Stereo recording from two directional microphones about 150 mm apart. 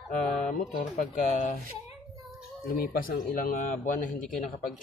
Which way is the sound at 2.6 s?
75° left (ahead or behind).